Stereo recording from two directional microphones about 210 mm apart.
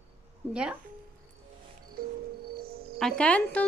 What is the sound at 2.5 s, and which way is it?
Music, 45° right (ahead or behind).